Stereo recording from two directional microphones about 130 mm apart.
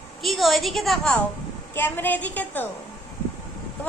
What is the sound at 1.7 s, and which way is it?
Speech, 15° left (ahead or behind).